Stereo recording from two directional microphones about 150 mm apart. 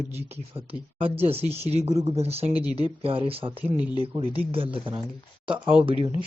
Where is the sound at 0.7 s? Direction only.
40° right (ahead or behind).